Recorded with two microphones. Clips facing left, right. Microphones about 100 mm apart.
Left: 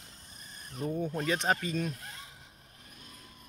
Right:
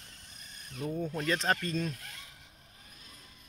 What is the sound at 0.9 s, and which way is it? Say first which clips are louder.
Speech: left 1 dB; 15° left (ahead or behind).